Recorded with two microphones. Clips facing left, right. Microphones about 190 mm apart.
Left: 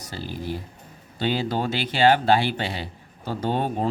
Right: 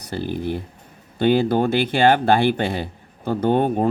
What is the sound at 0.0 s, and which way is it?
Speech, 55° right (ahead or behind).